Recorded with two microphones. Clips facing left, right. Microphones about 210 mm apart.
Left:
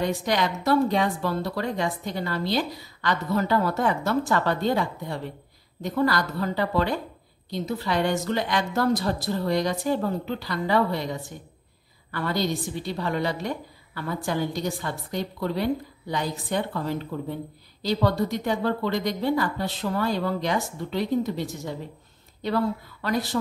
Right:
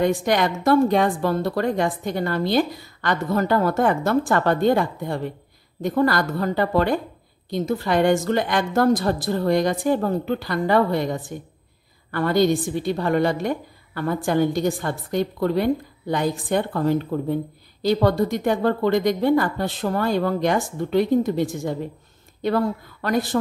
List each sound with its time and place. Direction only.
0.0 s a woman's voice: 50° right (ahead or behind)
23.0 s a woman's voice: 50° right (ahead or behind)